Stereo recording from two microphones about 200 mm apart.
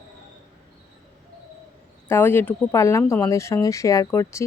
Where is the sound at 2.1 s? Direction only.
10° left (ahead or behind).